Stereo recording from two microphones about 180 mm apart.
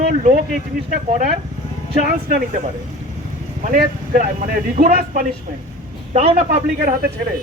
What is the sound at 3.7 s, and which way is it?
A man's voice, 45° right (ahead or behind).